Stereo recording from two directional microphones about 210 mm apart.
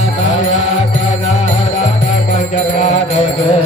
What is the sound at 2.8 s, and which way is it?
Mantra, 40° left (ahead or behind).